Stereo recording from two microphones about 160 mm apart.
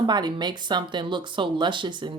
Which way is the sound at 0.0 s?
25° right (ahead or behind).